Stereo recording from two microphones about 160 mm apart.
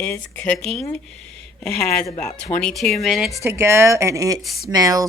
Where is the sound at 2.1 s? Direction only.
50° left (ahead or behind).